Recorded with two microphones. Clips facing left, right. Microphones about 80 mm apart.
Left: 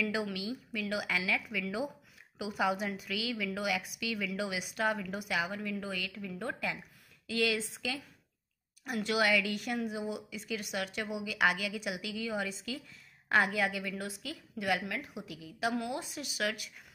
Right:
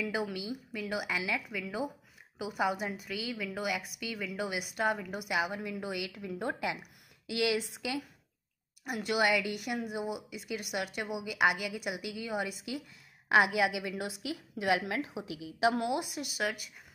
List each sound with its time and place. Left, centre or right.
0.1 s a woman's voice: centre
5.5 s a woman's voice: centre
6.1 s a woman's voice: right
6.6 s a woman's voice: centre
8.8 s a woman's voice: centre
16.3 s a woman's voice: centre